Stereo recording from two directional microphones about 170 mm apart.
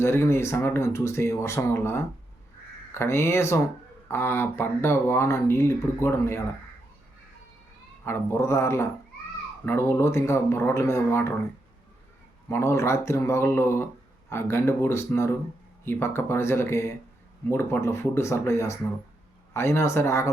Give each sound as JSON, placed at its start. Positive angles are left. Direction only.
{"t": 0.0, "sound": "speech", "side_deg": 15}
{"t": 8.0, "sound": "speech", "side_deg": 15}
{"t": 12.5, "sound": "speech", "side_deg": 15}